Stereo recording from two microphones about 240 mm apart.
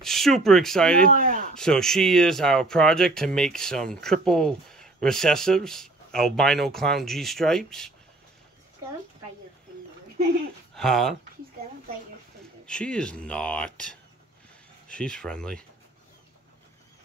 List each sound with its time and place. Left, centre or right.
0.0 s speech: centre
1.0 s speech: right
1.5 s speech: centre
10.7 s speech: centre
12.6 s speech: centre